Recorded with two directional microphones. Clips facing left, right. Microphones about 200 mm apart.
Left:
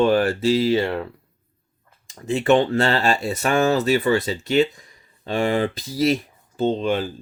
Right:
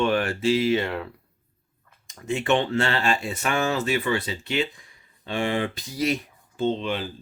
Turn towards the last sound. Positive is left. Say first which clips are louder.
# left 4 dB
turn(degrees=45)  # may be behind; listen again after turning